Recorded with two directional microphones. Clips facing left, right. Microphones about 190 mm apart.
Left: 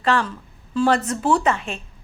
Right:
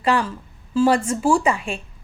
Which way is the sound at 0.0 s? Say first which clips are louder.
Right 1 dB; 10° right (ahead or behind).